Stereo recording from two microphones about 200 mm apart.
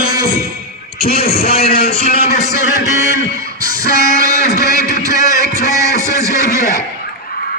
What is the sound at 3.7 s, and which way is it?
Music, 45° left (ahead or behind).